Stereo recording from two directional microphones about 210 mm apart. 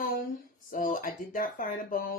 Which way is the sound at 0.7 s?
40° left (ahead or behind).